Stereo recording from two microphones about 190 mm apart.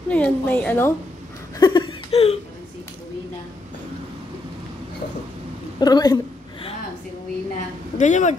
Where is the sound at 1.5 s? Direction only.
25° left (ahead or behind).